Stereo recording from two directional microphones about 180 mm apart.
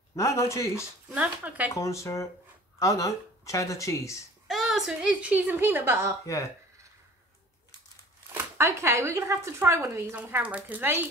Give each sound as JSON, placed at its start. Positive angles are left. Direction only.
{"t": 0.1, "sound": "speech", "side_deg": 15}
{"t": 0.7, "sound": "speech", "side_deg": -5}
{"t": 1.7, "sound": "speech", "side_deg": 15}
{"t": 4.5, "sound": "speech", "side_deg": 0}
{"t": 6.2, "sound": "speech", "side_deg": 15}
{"t": 8.3, "sound": "speech", "side_deg": -15}